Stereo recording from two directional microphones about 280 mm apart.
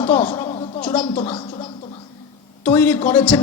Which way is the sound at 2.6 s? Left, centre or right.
Centre.